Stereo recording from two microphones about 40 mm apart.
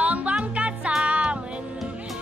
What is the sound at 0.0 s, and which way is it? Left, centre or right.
Music, right.